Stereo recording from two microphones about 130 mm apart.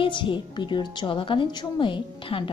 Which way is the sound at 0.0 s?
40° left (ahead or behind).